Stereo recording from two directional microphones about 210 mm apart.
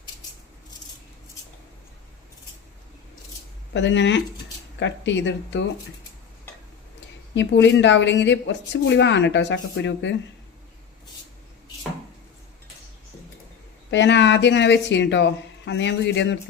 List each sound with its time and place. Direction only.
3.7 s a woman's voice: 55° left (ahead or behind)
7.3 s a woman's voice: 60° left (ahead or behind)
13.9 s a woman's voice: 55° left (ahead or behind)